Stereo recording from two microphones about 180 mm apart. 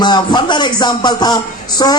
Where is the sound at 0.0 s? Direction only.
25° left (ahead or behind).